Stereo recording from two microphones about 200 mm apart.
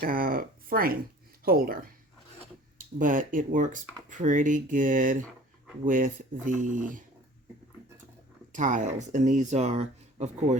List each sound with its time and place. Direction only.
0.0 s speech: 45° right (ahead or behind)
3.0 s speech: 40° right (ahead or behind)
8.5 s speech: 40° right (ahead or behind)